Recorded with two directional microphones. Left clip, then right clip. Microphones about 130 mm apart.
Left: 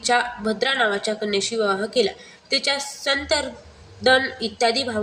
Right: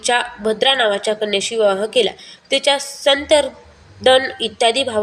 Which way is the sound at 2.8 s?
40° right (ahead or behind).